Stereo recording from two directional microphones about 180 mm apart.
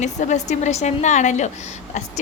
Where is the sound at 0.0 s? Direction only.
40° left (ahead or behind).